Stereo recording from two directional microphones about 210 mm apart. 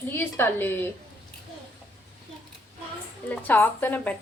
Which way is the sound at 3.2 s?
5° left (ahead or behind).